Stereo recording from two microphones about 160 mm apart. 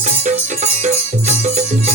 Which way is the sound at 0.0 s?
50° right (ahead or behind).